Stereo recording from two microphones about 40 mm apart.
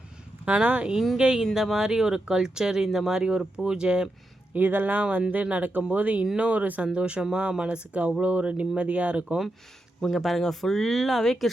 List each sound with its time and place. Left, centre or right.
0.4 s speech: right
1.5 s speech: centre
3.2 s speech: right
4.5 s speech: right
5.3 s speech: right
6.3 s speech: right
6.9 s speech: right
10.0 s speech: centre